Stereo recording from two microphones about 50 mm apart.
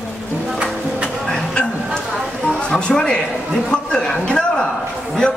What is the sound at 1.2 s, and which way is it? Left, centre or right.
Music, centre.